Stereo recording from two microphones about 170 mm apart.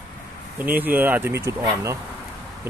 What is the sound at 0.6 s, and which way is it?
A man's voice, 10° right (ahead or behind).